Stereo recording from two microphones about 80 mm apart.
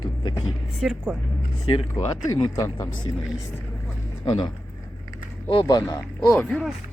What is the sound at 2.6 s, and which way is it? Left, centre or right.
Speech, left.